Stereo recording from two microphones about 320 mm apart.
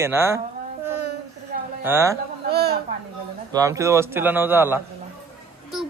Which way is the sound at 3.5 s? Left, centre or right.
Centre.